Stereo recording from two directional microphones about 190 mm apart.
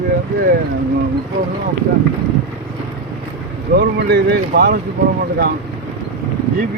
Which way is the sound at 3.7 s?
60° right (ahead or behind).